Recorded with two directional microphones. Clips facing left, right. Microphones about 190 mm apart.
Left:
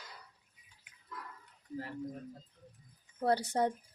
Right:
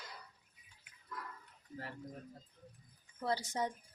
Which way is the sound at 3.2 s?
60° left (ahead or behind).